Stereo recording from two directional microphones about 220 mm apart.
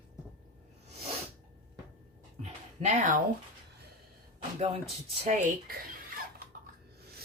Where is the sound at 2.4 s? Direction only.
30° right (ahead or behind).